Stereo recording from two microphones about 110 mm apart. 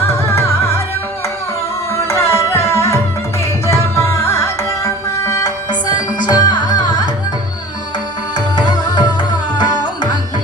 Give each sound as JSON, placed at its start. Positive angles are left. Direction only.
{"t": 0.1, "sound": "music", "side_deg": 25}
{"t": 1.9, "sound": "music", "side_deg": 25}
{"t": 5.9, "sound": "music", "side_deg": 40}
{"t": 8.4, "sound": "music", "side_deg": 40}
{"t": 9.8, "sound": "tabla", "side_deg": 45}